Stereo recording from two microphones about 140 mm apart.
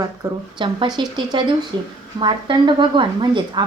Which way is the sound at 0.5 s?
35° right (ahead or behind).